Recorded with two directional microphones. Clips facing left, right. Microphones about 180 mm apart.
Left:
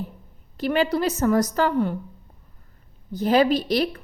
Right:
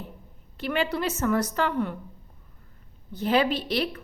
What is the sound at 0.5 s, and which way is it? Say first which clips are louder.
A woman's voice: left 5 dB; 40° left (ahead or behind).